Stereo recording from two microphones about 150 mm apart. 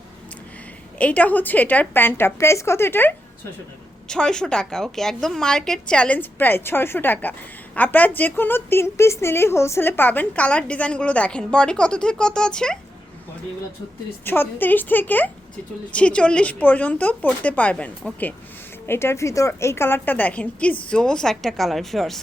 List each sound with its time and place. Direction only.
0.9 s a woman's voice: 10° left (ahead or behind)
14.3 s a woman's voice: 15° left (ahead or behind)